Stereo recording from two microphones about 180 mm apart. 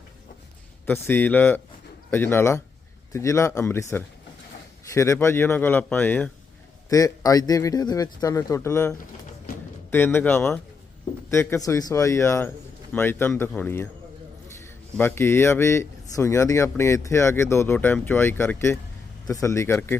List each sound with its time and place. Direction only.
0.9 s a man's voice: 10° left (ahead or behind)
9.5 s music: 55° left (ahead or behind)
9.9 s speech: 10° left (ahead or behind)